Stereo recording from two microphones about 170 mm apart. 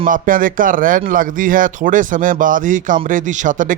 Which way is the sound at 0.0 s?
55° right (ahead or behind).